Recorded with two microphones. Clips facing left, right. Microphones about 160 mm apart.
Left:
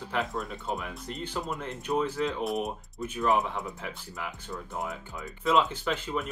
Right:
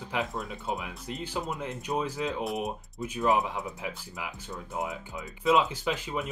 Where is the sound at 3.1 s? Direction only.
15° right (ahead or behind).